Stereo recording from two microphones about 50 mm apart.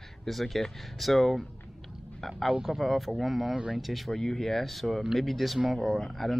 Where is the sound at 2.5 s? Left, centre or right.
Centre.